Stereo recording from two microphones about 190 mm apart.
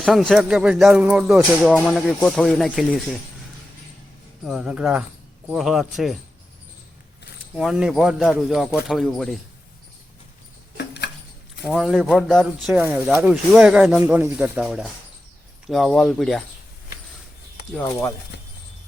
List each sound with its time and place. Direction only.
0.0 s speech: centre (ahead or behind)
4.4 s speech: 5° right (ahead or behind)
7.5 s speech: centre (ahead or behind)
10.8 s mouse: 60° left (ahead or behind)
11.6 s speech: centre (ahead or behind)
12.7 s speech: 10° right (ahead or behind)